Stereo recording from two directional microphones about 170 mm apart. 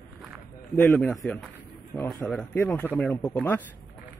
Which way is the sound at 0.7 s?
10° left (ahead or behind).